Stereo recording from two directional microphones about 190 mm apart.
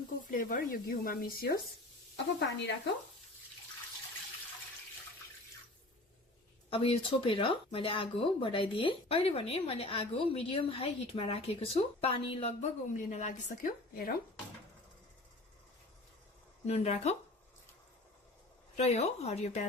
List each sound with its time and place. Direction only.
0.3 s speech: 45° left (ahead or behind)
2.1 s speech: 65° left (ahead or behind)
6.7 s speech: 30° left (ahead or behind); by 14.1 s 45° left (ahead or behind)
16.6 s a woman's voice: 35° left (ahead or behind)
18.8 s a woman's voice: 35° left (ahead or behind)